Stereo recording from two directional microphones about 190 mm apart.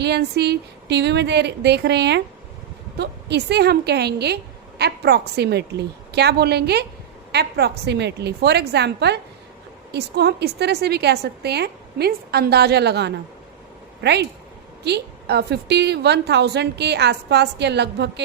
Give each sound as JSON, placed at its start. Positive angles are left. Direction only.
{"t": 0.0, "sound": "a woman's voice", "side_deg": -60}